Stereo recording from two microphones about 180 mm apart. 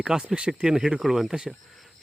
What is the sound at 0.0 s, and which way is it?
Speech, 5° right (ahead or behind).